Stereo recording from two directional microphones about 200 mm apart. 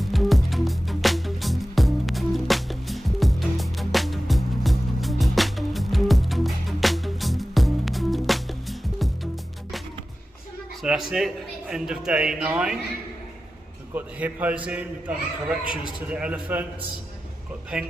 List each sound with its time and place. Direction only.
0.0 s music: centre (ahead or behind)
10.8 s a man's voice: centre (ahead or behind)
13.9 s a man's voice: 10° right (ahead or behind)
15.6 s a man's voice: 25° left (ahead or behind)
16.0 s a man's voice: 5° right (ahead or behind)